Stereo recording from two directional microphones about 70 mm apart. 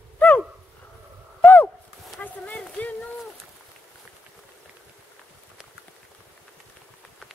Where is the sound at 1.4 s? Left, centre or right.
Left.